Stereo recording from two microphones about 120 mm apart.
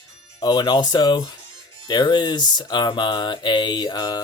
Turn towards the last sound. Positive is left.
turn(degrees=35)  # may be behind; listen again after turning